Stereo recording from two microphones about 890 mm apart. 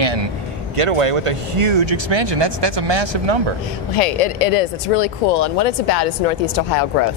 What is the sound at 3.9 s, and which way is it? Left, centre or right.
Speech, left.